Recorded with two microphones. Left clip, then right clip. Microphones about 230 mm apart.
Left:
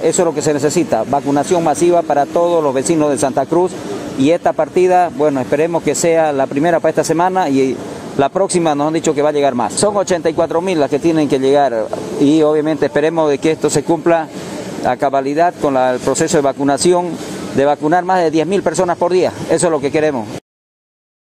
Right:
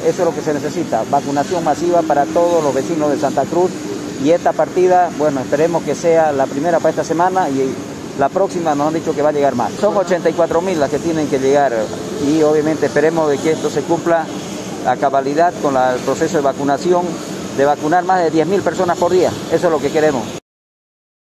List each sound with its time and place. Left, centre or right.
0.2 s speech: left
14.9 s speech: left